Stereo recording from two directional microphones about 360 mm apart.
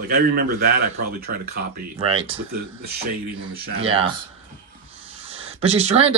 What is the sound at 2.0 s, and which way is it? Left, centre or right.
Speech, centre.